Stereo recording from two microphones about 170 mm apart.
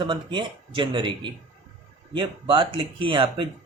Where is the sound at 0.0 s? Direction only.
25° right (ahead or behind).